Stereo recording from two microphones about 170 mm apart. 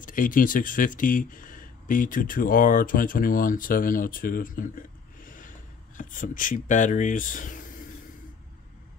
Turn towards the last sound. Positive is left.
turn(degrees=50)  # may be behind; listen again after turning